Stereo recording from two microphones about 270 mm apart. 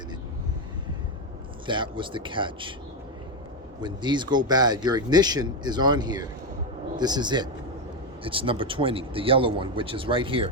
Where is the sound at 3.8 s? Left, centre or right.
Centre.